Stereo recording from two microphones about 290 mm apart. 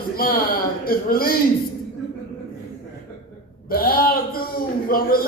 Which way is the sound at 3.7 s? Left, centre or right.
Left.